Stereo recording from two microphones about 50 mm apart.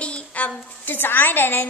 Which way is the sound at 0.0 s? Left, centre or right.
Left.